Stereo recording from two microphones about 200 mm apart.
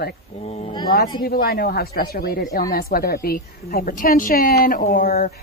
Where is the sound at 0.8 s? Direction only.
45° left (ahead or behind).